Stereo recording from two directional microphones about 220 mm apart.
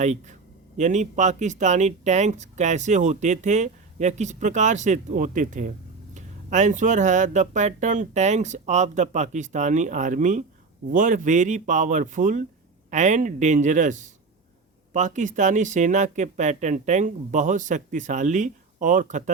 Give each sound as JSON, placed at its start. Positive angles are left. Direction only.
{"t": 0.0, "sound": "speech", "side_deg": -30}